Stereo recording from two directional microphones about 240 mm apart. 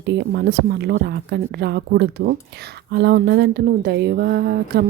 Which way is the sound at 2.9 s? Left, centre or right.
Right.